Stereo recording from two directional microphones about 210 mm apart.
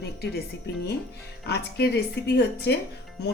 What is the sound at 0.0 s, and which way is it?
Speech, 50° left (ahead or behind).